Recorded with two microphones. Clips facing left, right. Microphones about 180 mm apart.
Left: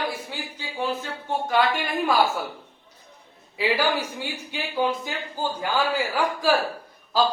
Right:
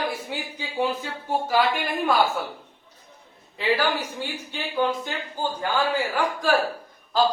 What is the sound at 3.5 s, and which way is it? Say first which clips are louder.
Speech: even; 10° left (ahead or behind).